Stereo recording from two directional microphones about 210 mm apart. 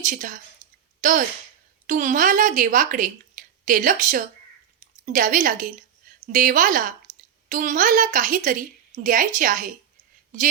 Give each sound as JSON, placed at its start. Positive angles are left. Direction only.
{"t": 0.0, "sound": "a woman's voice", "side_deg": -35}